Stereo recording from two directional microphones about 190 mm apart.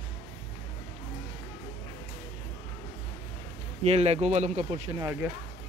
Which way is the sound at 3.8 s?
35° right (ahead or behind).